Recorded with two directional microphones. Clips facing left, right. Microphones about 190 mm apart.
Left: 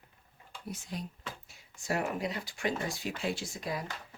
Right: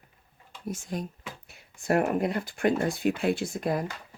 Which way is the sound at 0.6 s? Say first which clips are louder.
Right 7 dB; 45° right (ahead or behind).